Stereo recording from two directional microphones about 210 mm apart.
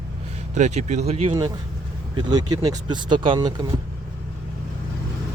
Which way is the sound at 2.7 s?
20° right (ahead or behind).